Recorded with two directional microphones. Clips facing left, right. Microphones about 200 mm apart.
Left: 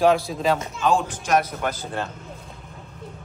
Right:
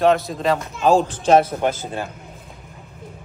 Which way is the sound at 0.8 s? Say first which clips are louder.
Right 8 dB; 35° right (ahead or behind).